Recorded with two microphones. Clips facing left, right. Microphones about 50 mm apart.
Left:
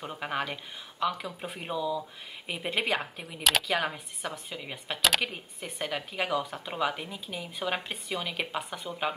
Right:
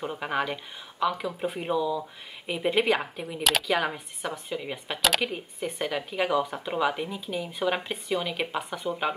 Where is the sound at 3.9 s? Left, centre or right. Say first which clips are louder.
Right 3 dB; right.